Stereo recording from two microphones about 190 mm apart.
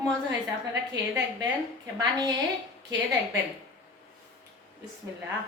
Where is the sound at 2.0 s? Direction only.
20° right (ahead or behind).